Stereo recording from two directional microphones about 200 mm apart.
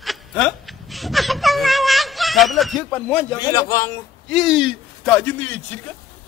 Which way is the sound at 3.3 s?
15° left (ahead or behind).